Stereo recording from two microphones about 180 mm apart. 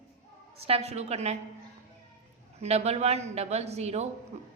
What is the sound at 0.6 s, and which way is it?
Speech, 35° right (ahead or behind).